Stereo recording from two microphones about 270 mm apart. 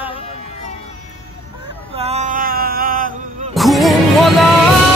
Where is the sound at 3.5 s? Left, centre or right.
Centre.